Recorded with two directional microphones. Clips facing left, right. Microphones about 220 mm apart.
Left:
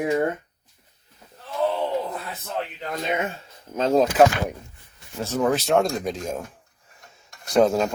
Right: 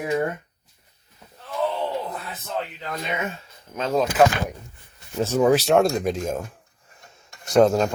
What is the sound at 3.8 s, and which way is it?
Speech, 35° left (ahead or behind).